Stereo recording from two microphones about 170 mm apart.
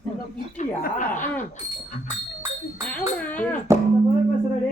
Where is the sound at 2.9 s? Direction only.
10° left (ahead or behind).